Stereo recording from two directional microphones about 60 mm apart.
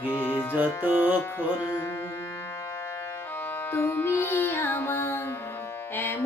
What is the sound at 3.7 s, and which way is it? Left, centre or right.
Music, left.